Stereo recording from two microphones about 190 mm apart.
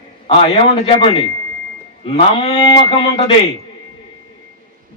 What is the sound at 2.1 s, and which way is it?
Speech, 30° left (ahead or behind).